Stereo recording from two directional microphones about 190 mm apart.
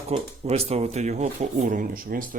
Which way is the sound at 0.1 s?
35° right (ahead or behind).